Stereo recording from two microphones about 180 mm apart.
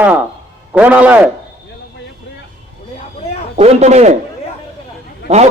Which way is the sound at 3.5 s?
35° right (ahead or behind).